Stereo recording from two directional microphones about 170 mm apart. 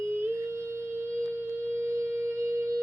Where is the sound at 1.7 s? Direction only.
15° right (ahead or behind).